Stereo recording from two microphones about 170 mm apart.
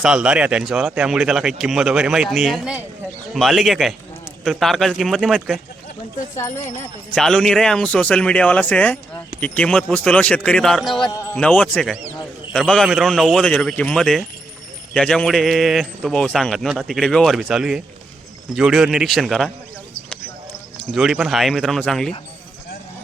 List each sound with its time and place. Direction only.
0.0 s speech: 5° right (ahead or behind)
6.3 s speech: 15° left (ahead or behind)
7.1 s speech: 5° left (ahead or behind)
20.9 s speech: centre (ahead or behind)